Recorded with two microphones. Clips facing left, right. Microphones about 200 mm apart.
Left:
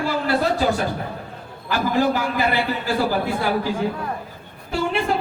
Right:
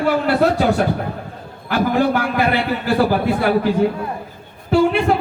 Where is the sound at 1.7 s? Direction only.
60° right (ahead or behind).